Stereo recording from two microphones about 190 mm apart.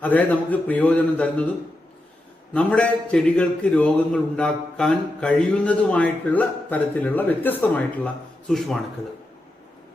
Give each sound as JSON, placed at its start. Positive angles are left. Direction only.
{"t": 0.0, "sound": "a man's voice", "side_deg": 10}
{"t": 2.5, "sound": "a man's voice", "side_deg": 5}